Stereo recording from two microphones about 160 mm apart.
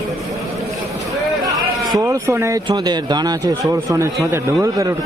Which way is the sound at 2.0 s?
15° right (ahead or behind).